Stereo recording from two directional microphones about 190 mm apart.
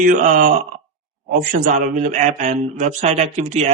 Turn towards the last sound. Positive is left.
turn(degrees=-35)  # may be behind; listen again after turning